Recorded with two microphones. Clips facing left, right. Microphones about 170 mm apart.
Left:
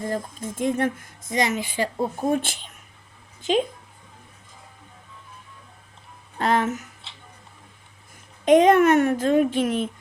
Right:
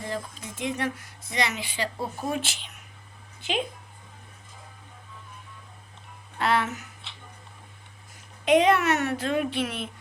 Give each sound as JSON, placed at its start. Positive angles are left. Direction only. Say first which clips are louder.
{"t": 0.0, "sound": "speech", "louder": "left 5 dB", "side_deg": 50}
{"t": 2.0, "sound": "speech", "louder": "left 7 dB", "side_deg": 20}
{"t": 2.3, "sound": "speech", "louder": "left 7 dB", "side_deg": 50}
{"t": 6.4, "sound": "speech", "louder": "left 3 dB", "side_deg": 45}
{"t": 8.4, "sound": "speech", "louder": "left 5 dB", "side_deg": 50}